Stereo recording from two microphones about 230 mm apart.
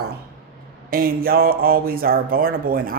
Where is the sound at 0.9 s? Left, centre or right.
Right.